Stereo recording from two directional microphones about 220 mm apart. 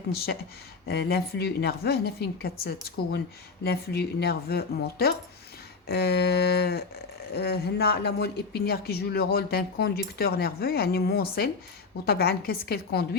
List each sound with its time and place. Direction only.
0.9 s speech: 45° left (ahead or behind)